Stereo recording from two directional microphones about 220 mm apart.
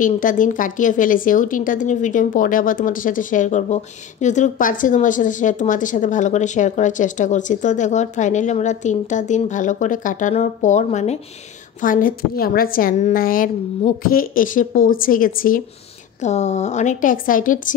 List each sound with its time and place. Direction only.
0.0 s a woman's voice: 35° left (ahead or behind)